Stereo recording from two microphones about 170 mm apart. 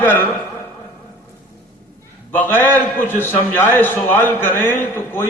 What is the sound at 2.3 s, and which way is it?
A man's voice, 10° left (ahead or behind).